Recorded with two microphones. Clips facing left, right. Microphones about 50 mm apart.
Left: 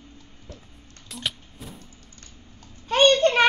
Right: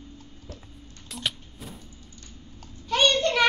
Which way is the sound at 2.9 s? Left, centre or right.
Left.